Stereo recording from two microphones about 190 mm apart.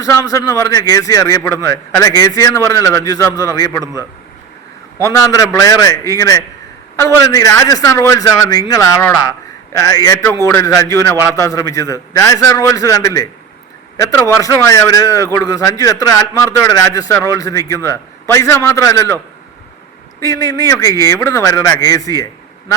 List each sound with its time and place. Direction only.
0.0 s a man's voice: 15° left (ahead or behind)
5.0 s a man's voice: 15° left (ahead or behind)